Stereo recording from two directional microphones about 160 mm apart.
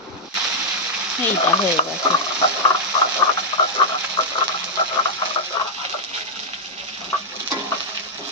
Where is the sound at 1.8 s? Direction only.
35° left (ahead or behind).